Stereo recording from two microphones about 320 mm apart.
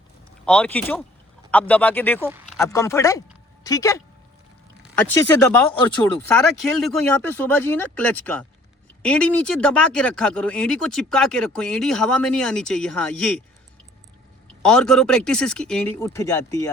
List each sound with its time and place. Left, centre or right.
0.4 s speech: centre
6.1 s speech: centre
14.6 s speech: centre